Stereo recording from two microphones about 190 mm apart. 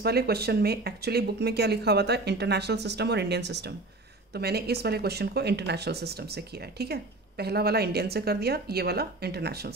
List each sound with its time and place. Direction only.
0.0 s speech: 55° right (ahead or behind)